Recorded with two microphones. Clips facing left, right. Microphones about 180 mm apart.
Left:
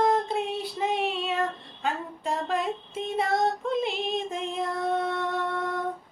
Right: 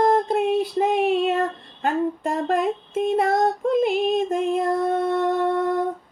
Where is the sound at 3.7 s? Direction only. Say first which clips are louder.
Right 8 dB; 50° right (ahead or behind).